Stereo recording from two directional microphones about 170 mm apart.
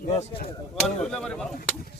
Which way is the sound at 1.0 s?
5° left (ahead or behind).